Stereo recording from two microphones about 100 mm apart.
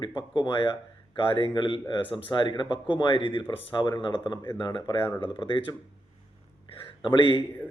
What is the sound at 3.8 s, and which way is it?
Speech, 45° left (ahead or behind).